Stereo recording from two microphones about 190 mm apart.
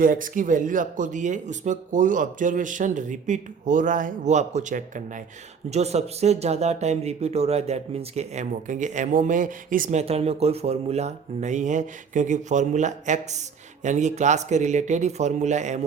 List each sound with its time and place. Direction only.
0.0 s speech: 45° right (ahead or behind)